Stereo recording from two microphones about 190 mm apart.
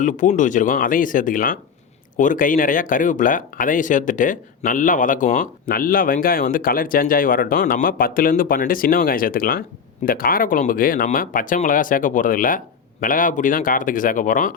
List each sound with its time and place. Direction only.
0.0 s speech: 40° left (ahead or behind)